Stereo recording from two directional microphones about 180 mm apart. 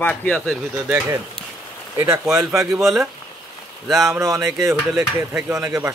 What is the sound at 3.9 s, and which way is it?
Speech, 15° right (ahead or behind).